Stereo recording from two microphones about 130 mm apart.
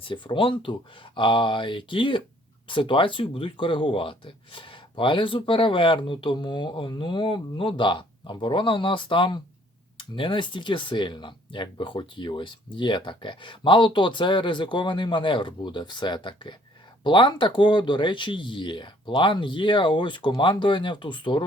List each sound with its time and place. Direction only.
0.0 s speech: 40° left (ahead or behind)